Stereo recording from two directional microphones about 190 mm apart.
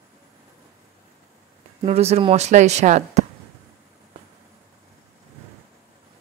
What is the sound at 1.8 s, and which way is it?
Speech, 35° right (ahead or behind).